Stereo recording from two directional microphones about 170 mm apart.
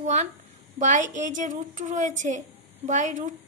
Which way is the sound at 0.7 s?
45° right (ahead or behind).